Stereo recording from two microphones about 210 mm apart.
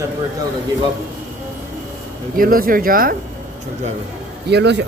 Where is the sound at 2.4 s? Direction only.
45° right (ahead or behind).